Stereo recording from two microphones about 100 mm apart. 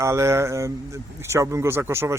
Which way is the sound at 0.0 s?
30° right (ahead or behind).